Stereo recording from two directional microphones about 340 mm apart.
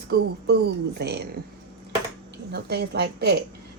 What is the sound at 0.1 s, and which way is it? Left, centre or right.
A woman's voice, right.